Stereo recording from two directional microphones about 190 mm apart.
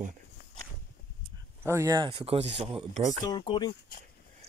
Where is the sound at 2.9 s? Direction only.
40° right (ahead or behind).